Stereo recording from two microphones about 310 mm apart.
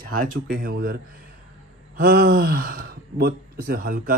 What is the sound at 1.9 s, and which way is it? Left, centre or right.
Speech, right.